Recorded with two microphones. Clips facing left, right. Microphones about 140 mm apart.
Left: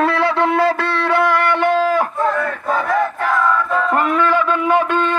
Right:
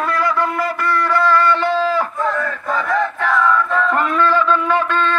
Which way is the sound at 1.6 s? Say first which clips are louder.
Left 2 dB; 50° left (ahead or behind).